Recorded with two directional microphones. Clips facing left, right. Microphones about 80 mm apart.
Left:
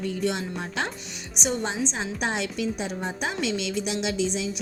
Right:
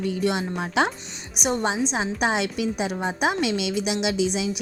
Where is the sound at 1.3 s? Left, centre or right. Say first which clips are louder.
Right 4 dB; right.